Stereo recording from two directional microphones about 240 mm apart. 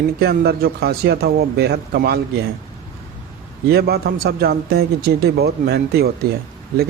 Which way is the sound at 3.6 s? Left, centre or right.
Right.